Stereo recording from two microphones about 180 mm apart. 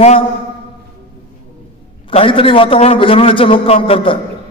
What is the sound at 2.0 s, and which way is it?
A man's voice, 30° left (ahead or behind).